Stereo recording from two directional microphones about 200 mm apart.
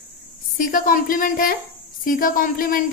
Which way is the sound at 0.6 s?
45° left (ahead or behind).